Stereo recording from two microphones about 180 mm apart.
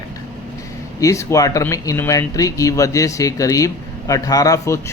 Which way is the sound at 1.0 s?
15° left (ahead or behind).